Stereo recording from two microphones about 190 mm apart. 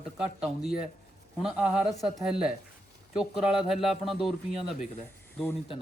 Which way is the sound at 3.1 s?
5° right (ahead or behind).